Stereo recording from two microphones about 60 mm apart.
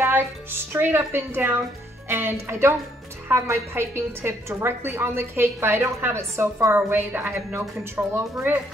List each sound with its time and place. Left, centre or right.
0.0 s a woman's voice: right
6.7 s speech: right